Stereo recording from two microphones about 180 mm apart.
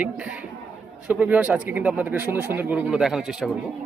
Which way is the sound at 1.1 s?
10° right (ahead or behind).